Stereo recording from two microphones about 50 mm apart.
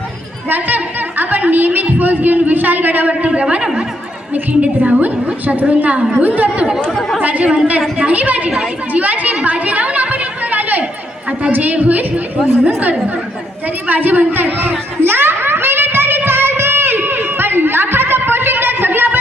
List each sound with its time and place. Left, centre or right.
0.5 s a woman's voice: right
7.4 s a woman's voice: centre
7.9 s a woman's voice: right
8.9 s chatter: right
11.5 s speech: right
15.0 s a sound: right